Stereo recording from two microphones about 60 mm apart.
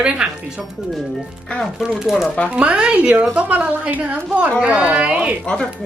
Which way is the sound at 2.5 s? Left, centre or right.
Centre.